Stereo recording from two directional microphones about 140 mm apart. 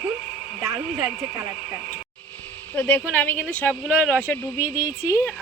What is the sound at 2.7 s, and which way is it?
A woman's voice, 10° left (ahead or behind).